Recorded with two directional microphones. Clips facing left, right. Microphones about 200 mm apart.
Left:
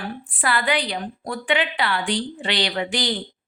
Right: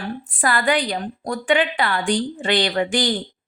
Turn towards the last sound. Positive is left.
turn(degrees=-50)  # may be behind; listen again after turning